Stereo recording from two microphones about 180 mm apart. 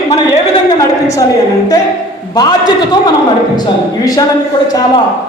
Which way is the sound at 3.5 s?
20° left (ahead or behind).